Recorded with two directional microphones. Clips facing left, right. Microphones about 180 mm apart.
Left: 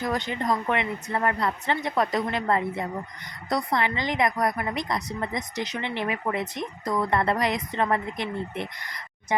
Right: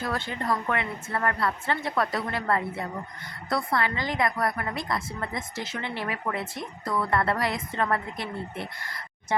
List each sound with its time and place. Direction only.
0.0 s a woman's voice: 20° left (ahead or behind)